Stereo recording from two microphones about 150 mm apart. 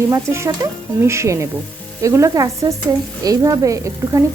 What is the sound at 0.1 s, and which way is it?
A woman's voice, 20° right (ahead or behind).